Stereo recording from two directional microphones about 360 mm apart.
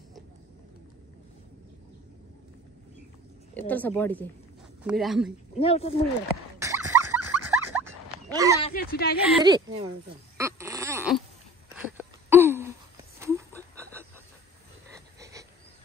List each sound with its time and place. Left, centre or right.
3.5 s a woman's voice: centre
5.6 s speech: centre
6.6 s a sound: centre
8.6 s a woman's voice: left
9.4 s speech: centre
10.3 s a sound: centre
15.1 s frog: centre